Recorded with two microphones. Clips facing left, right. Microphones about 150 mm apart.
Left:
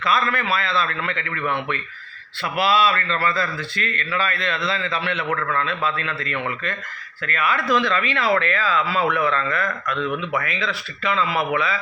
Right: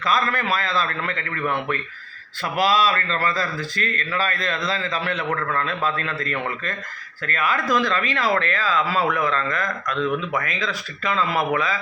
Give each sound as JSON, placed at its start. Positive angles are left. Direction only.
{"t": 0.0, "sound": "a man's voice", "side_deg": -40}
{"t": 9.8, "sound": "speech", "side_deg": 5}
{"t": 10.3, "sound": "a man's voice", "side_deg": -40}